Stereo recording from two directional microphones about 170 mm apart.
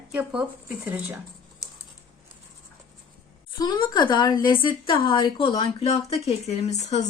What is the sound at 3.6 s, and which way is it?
A woman's voice, 25° left (ahead or behind).